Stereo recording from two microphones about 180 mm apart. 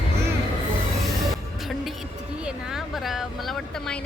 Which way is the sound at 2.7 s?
Centre (ahead or behind).